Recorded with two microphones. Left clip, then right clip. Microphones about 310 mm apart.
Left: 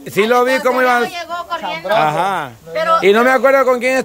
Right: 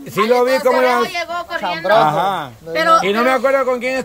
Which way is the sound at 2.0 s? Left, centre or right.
Centre.